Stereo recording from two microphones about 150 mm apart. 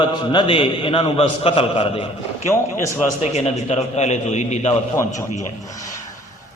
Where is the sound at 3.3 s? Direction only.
45° left (ahead or behind).